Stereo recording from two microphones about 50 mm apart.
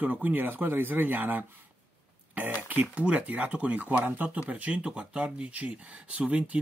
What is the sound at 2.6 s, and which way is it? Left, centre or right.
Speech, right.